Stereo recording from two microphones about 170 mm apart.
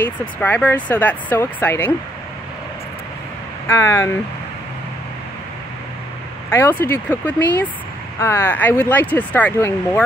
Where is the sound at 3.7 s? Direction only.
15° left (ahead or behind).